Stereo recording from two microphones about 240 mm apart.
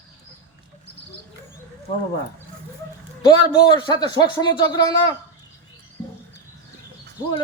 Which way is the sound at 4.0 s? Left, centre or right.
Centre.